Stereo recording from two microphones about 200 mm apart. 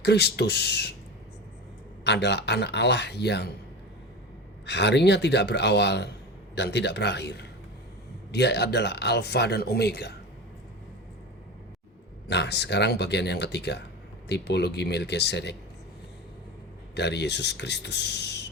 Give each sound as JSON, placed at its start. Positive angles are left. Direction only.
{"t": 0.0, "sound": "speech", "side_deg": 55}
{"t": 2.0, "sound": "speech", "side_deg": 60}
{"t": 4.6, "sound": "speech", "side_deg": 60}
{"t": 12.3, "sound": "speech", "side_deg": 55}
{"t": 16.9, "sound": "speech", "side_deg": 60}